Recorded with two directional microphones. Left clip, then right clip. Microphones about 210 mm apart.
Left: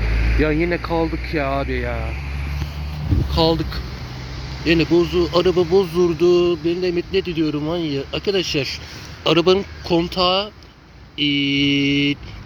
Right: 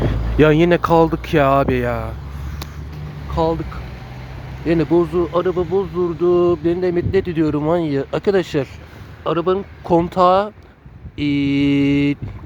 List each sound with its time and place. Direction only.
0.3 s speech: 40° right (ahead or behind)
3.3 s speech: 5° right (ahead or behind)
4.6 s speech: 10° right (ahead or behind)
5.3 s speech: centre (ahead or behind)
6.2 s speech: 5° right (ahead or behind)
9.2 s speech: 5° left (ahead or behind)
10.2 s speech: 20° right (ahead or behind)
11.2 s mantra: 55° right (ahead or behind)